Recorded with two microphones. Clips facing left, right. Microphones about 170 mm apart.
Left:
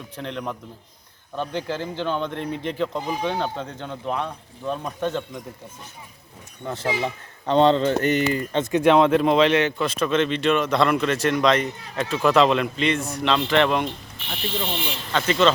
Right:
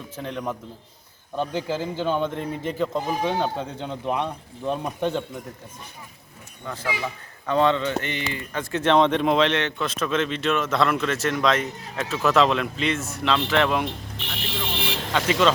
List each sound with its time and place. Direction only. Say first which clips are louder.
0.2 s speech: right 1 dB; 5° right (ahead or behind)
6.7 s speech: left 4 dB; 25° left (ahead or behind); by 8.4 s 40° left (ahead or behind)
8.5 s a man's voice: left 2 dB; 15° left (ahead or behind)
15.3 s speech: left 1 dB; 10° right (ahead or behind)